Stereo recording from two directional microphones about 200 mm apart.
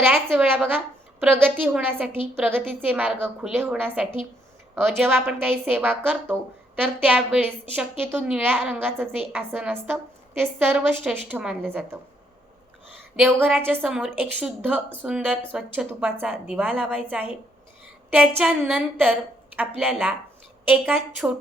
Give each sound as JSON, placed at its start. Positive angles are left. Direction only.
{"t": 0.3, "sound": "a woman's voice", "side_deg": -5}
{"t": 13.1, "sound": "a woman's voice", "side_deg": -10}